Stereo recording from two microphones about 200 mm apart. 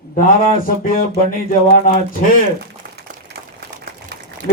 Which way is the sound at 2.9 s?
50° right (ahead or behind).